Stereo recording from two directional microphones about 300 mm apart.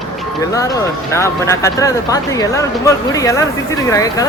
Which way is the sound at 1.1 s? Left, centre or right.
Centre.